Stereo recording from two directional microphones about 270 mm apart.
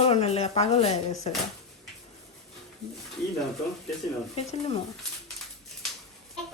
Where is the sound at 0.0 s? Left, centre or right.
Left.